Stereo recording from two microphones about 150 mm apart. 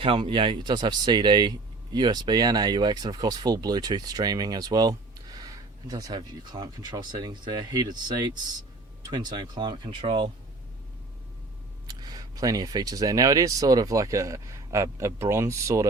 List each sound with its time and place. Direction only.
0.0 s speech: 35° right (ahead or behind)
11.9 s speech: 25° right (ahead or behind)